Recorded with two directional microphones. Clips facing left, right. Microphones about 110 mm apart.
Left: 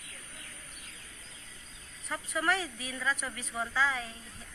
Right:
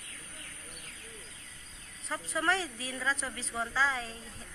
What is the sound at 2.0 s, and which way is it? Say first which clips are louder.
A woman's voice: even; 30° right (ahead or behind).